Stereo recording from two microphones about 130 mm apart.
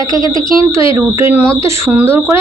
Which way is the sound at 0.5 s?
45° left (ahead or behind).